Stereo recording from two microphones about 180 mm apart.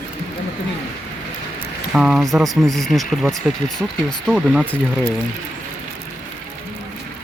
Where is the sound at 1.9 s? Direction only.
Centre (ahead or behind).